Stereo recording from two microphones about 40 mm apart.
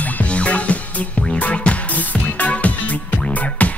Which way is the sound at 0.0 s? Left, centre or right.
Left.